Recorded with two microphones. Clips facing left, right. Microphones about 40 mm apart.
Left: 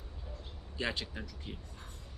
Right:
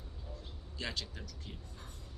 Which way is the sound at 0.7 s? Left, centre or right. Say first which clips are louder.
Left 5 dB; left.